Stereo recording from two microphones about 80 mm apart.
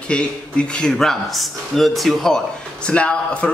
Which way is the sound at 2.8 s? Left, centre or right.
Centre.